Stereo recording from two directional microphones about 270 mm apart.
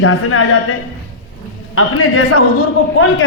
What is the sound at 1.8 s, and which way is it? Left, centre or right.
Speech, left.